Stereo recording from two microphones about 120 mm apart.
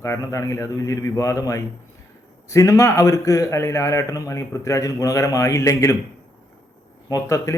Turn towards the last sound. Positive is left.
turn(degrees=25)  # may be behind; listen again after turning